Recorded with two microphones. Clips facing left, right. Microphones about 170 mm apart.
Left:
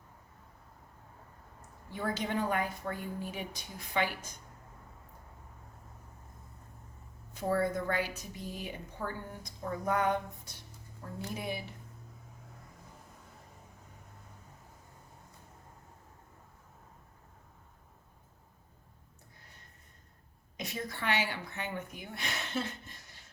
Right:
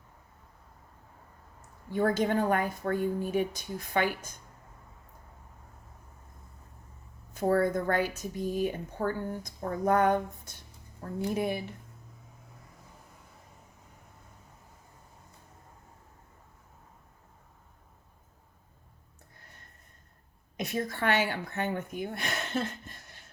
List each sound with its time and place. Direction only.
1.9 s a woman's voice: 50° right (ahead or behind)
7.3 s a woman's voice: 50° right (ahead or behind)
20.6 s a woman's voice: 50° right (ahead or behind)